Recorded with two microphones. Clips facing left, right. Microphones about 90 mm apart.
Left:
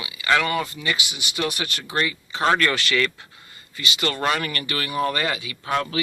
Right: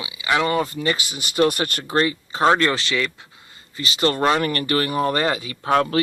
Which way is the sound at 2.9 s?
15° right (ahead or behind).